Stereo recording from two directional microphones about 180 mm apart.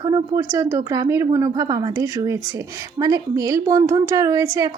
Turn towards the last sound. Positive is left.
turn(degrees=-20)  # may be behind; listen again after turning